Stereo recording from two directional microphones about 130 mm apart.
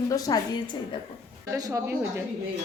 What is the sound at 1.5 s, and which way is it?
Speech, 25° right (ahead or behind).